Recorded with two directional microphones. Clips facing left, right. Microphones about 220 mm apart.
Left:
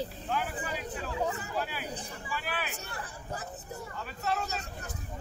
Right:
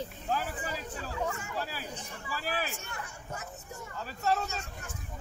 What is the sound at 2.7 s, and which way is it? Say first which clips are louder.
A man's voice: left 1 dB; 35° left (ahead or behind).